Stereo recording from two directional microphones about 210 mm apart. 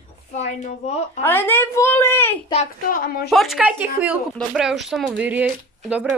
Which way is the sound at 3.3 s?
Centre (ahead or behind).